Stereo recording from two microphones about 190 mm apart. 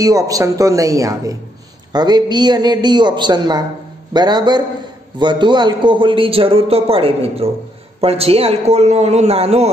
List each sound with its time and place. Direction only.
0.0 s a man's voice: 20° right (ahead or behind); by 9.7 s 35° right (ahead or behind)